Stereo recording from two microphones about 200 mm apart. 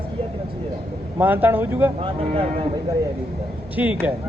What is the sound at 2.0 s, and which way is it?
Speech, 30° right (ahead or behind).